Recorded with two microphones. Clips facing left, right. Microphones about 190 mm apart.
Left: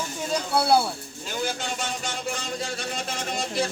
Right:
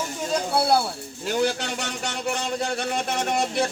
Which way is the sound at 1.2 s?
70° right (ahead or behind).